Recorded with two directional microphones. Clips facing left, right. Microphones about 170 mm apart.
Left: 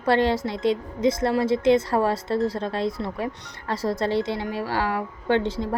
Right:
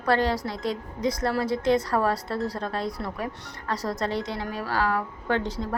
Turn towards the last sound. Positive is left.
turn(degrees=25)  # may be behind; listen again after turning